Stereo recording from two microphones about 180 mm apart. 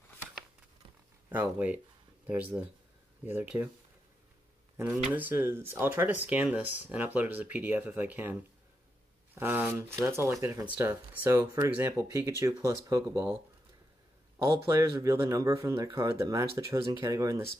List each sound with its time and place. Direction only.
2.2 s speech: 5° right (ahead or behind)
4.7 s speech: 10° right (ahead or behind)
14.7 s speech: 15° right (ahead or behind)